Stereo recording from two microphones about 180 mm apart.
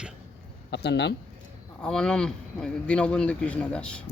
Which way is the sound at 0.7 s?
70° left (ahead or behind).